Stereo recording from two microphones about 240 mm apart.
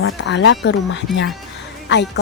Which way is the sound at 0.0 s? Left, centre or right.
Left.